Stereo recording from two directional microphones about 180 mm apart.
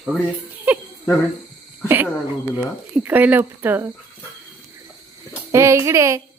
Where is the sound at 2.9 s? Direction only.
10° right (ahead or behind).